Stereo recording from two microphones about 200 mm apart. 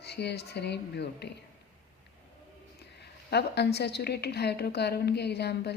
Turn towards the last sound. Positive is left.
turn(degrees=55)  # may be behind; listen again after turning